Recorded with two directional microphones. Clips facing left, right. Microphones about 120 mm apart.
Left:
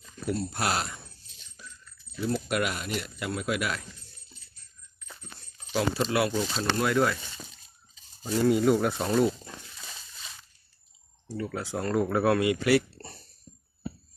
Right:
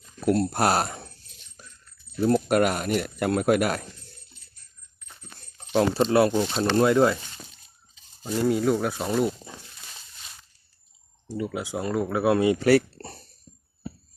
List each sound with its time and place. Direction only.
0.3 s speech: 70° right (ahead or behind)
0.5 s speech: 45° right (ahead or behind)
2.5 s speech: 45° right (ahead or behind)
5.5 s speech: 35° right (ahead or behind)
8.4 s speech: centre (ahead or behind)
11.3 s speech: 15° right (ahead or behind)
12.3 s speech: 30° right (ahead or behind)